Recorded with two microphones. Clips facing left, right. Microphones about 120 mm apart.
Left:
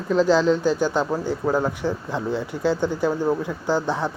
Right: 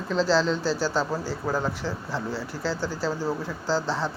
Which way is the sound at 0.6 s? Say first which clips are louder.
Left 4 dB; 20° left (ahead or behind).